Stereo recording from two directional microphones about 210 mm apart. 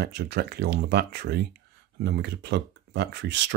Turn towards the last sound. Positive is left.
turn(degrees=-55)  # may be behind; listen again after turning